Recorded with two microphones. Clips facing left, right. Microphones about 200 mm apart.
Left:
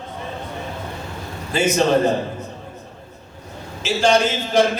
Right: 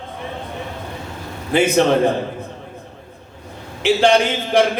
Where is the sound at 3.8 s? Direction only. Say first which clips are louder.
Right 3 dB; 60° right (ahead or behind).